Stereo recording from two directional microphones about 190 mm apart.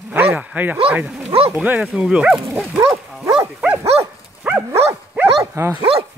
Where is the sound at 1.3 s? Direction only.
30° right (ahead or behind).